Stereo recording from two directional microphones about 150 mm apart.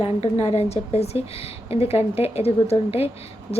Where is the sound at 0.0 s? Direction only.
45° left (ahead or behind).